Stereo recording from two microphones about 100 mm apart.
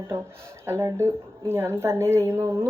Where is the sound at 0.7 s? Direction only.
25° right (ahead or behind).